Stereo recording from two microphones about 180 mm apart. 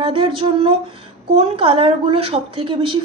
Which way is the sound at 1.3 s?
35° right (ahead or behind).